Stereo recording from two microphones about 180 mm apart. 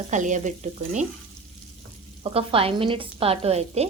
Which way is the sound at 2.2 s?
30° right (ahead or behind).